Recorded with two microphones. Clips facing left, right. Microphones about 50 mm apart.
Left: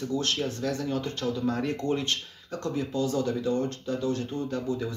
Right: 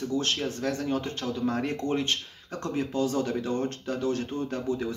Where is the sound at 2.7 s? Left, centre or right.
Right.